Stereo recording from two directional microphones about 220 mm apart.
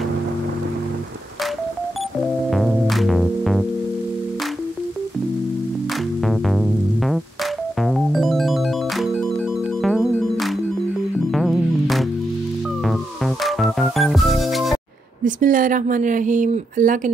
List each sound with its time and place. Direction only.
2.5 s music: centre (ahead or behind)
6.2 s music: centre (ahead or behind)
7.8 s keyboard: centre (ahead or behind)
9.8 s music: centre (ahead or behind)
15.2 s speech: 35° right (ahead or behind)